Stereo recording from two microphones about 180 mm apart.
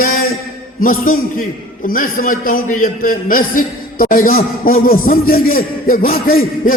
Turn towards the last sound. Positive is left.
turn(degrees=55)  # may be behind; listen again after turning